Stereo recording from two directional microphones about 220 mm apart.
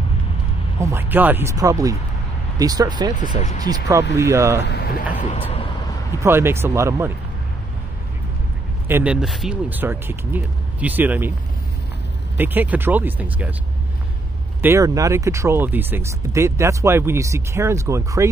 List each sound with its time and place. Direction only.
0.7 s speech: 10° right (ahead or behind)
4.6 s speech: 45° left (ahead or behind)
5.3 s speech: 30° left (ahead or behind)
6.1 s speech: 10° right (ahead or behind)
8.8 s speech: 10° right (ahead or behind)
12.4 s speech: 10° right (ahead or behind)
14.6 s speech: 15° right (ahead or behind)